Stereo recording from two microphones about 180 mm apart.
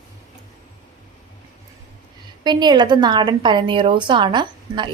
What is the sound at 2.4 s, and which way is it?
A woman's voice, 25° right (ahead or behind).